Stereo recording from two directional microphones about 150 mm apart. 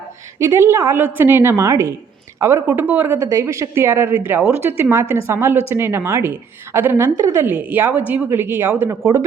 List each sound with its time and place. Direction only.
0.3 s a woman's voice: 20° right (ahead or behind)